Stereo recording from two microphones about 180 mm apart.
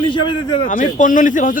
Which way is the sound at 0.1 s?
25° left (ahead or behind).